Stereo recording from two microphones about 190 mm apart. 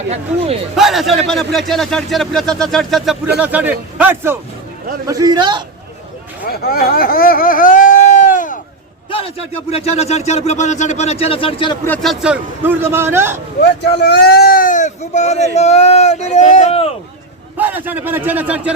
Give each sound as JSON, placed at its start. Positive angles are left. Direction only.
{"t": 0.1, "sound": "speech", "side_deg": -30}
{"t": 0.8, "sound": "a man's voice", "side_deg": 0}
{"t": 6.4, "sound": "speech", "side_deg": 55}
{"t": 9.0, "sound": "speech", "side_deg": 30}
{"t": 11.9, "sound": "a man's voice", "side_deg": 0}
{"t": 14.0, "sound": "speech", "side_deg": 60}
{"t": 17.6, "sound": "a man's voice", "side_deg": -10}